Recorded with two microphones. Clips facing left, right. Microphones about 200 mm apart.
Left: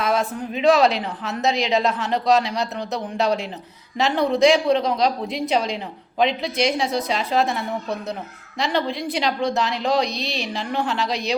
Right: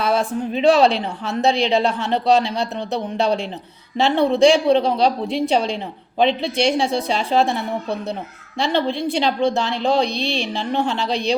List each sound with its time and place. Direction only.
0.0 s a woman's voice: 30° right (ahead or behind)